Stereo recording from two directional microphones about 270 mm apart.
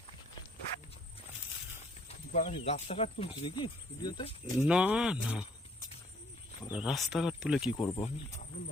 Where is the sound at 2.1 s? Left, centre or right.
Left.